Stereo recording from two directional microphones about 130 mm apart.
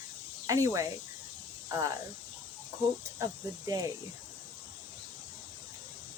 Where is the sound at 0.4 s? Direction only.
25° right (ahead or behind).